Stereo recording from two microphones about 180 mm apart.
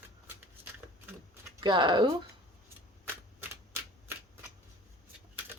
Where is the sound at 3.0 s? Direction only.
15° right (ahead or behind).